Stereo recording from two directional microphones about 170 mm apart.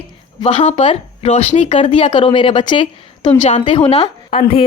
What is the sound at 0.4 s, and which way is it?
A woman's voice, 40° left (ahead or behind).